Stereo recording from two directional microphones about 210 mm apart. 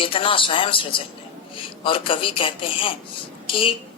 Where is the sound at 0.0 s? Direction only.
25° left (ahead or behind).